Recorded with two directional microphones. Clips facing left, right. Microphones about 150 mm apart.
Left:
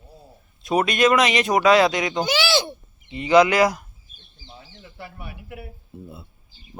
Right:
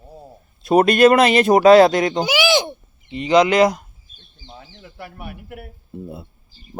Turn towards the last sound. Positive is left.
turn(degrees=-45)  # may be behind; listen again after turning